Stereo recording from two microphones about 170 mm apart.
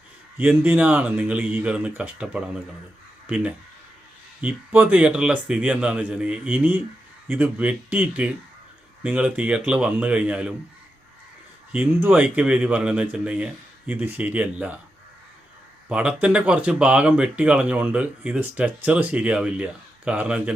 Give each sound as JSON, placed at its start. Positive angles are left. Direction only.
{"t": 0.3, "sound": "speech", "side_deg": -10}
{"t": 11.7, "sound": "speech", "side_deg": -10}
{"t": 15.9, "sound": "speech", "side_deg": -5}